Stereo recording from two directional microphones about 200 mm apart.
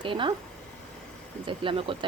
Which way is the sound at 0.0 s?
25° right (ahead or behind).